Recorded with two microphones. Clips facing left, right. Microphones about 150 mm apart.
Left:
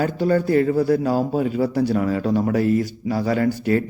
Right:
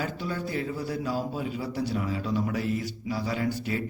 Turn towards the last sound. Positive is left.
turn(degrees=55)  # may be behind; listen again after turning